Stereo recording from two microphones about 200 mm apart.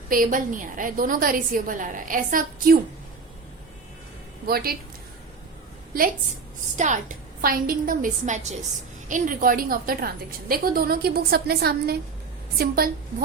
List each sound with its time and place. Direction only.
0.1 s a woman's voice: 45° right (ahead or behind)
4.4 s a woman's voice: 50° right (ahead or behind)
6.7 s a woman's voice: 40° right (ahead or behind)